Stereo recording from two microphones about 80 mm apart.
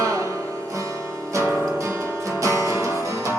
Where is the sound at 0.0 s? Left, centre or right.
Right.